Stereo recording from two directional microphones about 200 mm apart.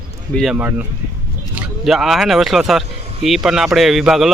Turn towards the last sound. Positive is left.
turn(degrees=0)  # may be behind; listen again after turning